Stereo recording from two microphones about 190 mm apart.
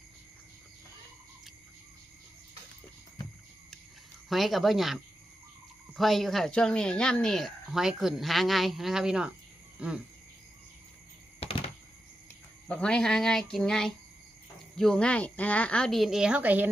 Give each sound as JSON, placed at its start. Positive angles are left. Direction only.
{"t": 4.3, "sound": "speech", "side_deg": 0}
{"t": 9.8, "sound": "insect", "side_deg": -5}
{"t": 11.3, "sound": "a sound", "side_deg": 30}
{"t": 12.6, "sound": "speech", "side_deg": 5}